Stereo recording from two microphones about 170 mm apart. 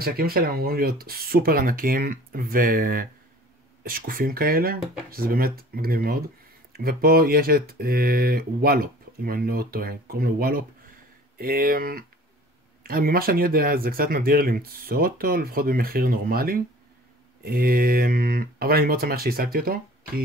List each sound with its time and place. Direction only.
0.0 s speech: 60° right (ahead or behind)